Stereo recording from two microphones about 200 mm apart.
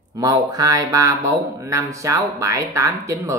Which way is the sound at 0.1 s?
20° right (ahead or behind).